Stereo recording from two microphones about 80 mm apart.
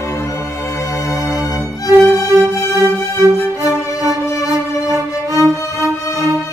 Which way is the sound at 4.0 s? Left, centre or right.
Right.